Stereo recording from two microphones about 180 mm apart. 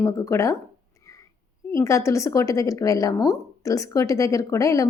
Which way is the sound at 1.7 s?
15° left (ahead or behind).